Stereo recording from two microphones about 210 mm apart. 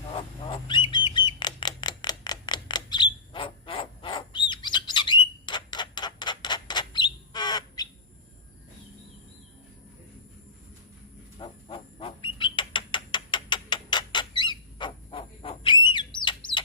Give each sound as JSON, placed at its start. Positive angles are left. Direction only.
{"t": 0.1, "sound": "bird", "side_deg": 25}
{"t": 11.3, "sound": "bird", "side_deg": 25}